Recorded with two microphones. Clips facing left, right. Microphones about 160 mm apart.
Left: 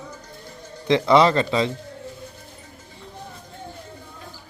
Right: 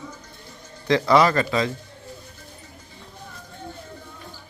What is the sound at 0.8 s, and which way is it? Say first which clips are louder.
Speech: left 1 dB; 20° left (ahead or behind).